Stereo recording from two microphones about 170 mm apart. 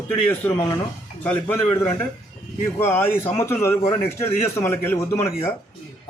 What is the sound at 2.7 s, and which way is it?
A man's voice, 15° left (ahead or behind).